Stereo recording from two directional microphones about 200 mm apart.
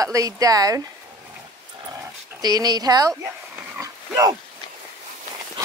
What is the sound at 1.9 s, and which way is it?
Dog, 20° right (ahead or behind).